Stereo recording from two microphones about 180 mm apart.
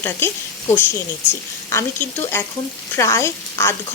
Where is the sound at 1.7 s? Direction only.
15° left (ahead or behind).